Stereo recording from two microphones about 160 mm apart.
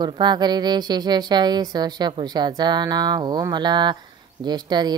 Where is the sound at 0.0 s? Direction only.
25° right (ahead or behind).